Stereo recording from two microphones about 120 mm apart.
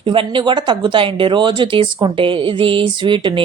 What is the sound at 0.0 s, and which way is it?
Speech, 45° right (ahead or behind).